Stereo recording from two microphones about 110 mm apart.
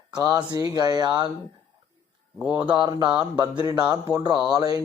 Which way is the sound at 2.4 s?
10° right (ahead or behind).